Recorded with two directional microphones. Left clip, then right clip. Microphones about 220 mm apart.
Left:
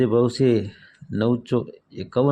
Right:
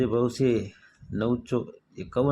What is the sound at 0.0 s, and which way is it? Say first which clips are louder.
Speech: left 5 dB; 30° left (ahead or behind).